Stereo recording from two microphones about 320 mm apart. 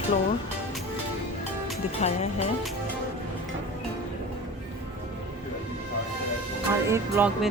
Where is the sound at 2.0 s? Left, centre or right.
Centre.